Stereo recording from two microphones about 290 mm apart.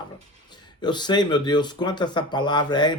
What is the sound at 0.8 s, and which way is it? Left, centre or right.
Speech, centre.